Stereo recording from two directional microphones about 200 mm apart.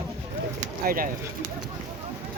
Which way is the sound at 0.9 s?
45° right (ahead or behind).